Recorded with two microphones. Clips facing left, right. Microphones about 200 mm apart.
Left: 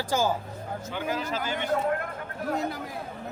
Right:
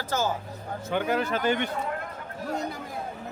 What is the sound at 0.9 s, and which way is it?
Speech, 60° right (ahead or behind).